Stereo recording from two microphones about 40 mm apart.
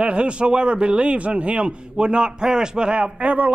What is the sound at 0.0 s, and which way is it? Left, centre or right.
A man's voice, right.